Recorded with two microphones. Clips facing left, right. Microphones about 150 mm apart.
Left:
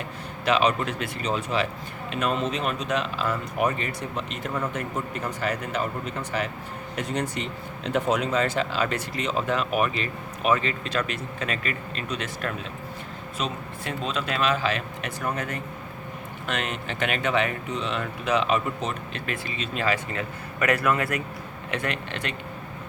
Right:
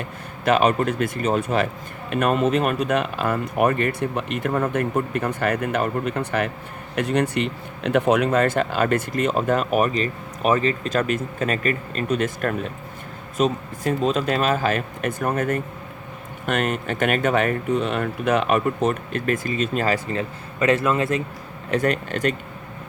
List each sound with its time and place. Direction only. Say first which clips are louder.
0.4 s speech: right 4 dB; 50° right (ahead or behind); by 21.2 s 25° right (ahead or behind)
21.7 s speech: right 8 dB; 40° right (ahead or behind)